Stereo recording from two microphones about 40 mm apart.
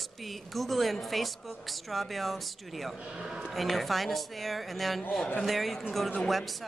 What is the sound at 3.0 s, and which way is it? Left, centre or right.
Speech, right.